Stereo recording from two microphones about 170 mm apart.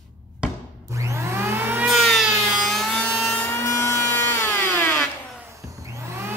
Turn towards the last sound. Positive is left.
turn(degrees=-15)  # may be behind; listen again after turning